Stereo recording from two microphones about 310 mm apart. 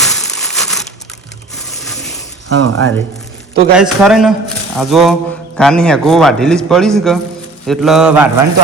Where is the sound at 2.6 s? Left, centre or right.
Right.